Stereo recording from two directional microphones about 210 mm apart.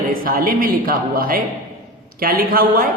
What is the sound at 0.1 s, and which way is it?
A man's voice, 40° right (ahead or behind).